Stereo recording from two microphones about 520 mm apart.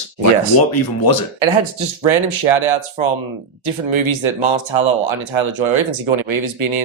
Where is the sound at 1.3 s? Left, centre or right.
Right.